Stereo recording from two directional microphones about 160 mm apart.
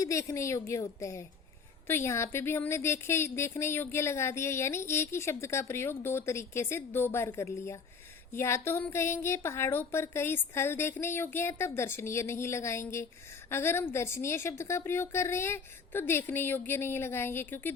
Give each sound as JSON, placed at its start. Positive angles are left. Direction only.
{"t": 0.0, "sound": "a woman's voice", "side_deg": 20}